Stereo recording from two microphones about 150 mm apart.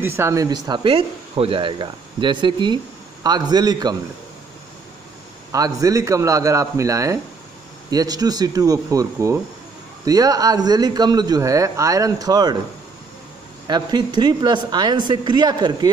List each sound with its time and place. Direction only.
0.0 s speech: 15° right (ahead or behind)
5.5 s speech: 25° right (ahead or behind)
13.7 s speech: 30° right (ahead or behind)